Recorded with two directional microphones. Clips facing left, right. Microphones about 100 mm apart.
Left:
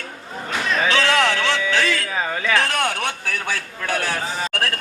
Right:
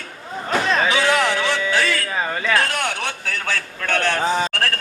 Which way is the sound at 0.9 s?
10° right (ahead or behind).